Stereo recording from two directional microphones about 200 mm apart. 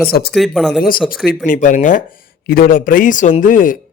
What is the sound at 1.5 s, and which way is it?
A man's voice, 40° left (ahead or behind).